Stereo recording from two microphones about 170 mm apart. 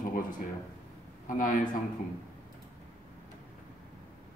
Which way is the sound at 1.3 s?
55° left (ahead or behind).